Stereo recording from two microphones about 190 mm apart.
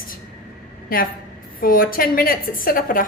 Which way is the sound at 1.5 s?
50° left (ahead or behind).